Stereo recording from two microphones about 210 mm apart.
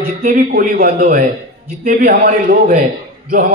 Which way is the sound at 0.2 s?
40° right (ahead or behind).